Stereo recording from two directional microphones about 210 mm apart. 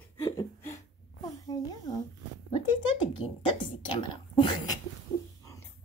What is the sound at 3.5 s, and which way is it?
Speech, 20° left (ahead or behind).